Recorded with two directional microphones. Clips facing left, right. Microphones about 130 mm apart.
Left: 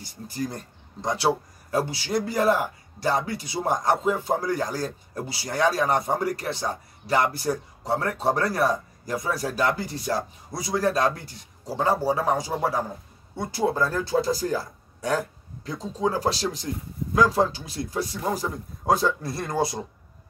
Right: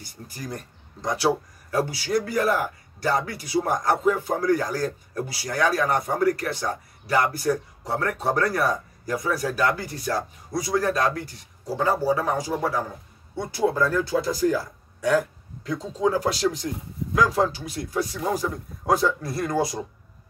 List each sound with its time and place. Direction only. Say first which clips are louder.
0.3 s a man's voice: left 4 dB; 25° left (ahead or behind)
13.7 s a man's voice: right 1 dB; 30° left (ahead or behind)